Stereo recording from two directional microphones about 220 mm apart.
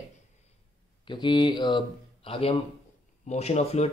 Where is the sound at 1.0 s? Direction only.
20° left (ahead or behind).